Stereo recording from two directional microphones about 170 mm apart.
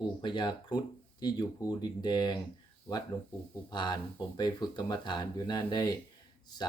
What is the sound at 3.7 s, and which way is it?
Speech, 25° left (ahead or behind).